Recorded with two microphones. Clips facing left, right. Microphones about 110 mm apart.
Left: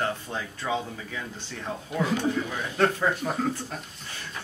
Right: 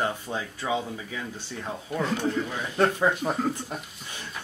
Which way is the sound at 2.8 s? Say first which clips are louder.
Right 1 dB; 15° right (ahead or behind).